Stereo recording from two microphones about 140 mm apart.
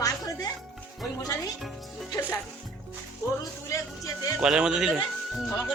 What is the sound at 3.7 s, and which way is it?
Speech, 25° left (ahead or behind).